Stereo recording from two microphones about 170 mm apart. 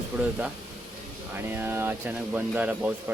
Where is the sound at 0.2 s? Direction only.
10° right (ahead or behind).